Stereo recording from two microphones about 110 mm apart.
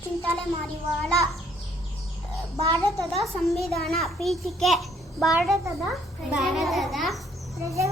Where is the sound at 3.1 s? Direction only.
Centre (ahead or behind).